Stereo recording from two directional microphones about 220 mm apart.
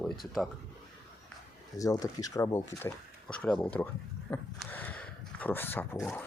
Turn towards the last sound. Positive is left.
turn(degrees=10)  # may be behind; listen again after turning